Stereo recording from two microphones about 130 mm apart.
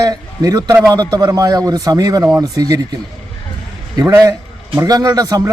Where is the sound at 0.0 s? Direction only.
25° right (ahead or behind).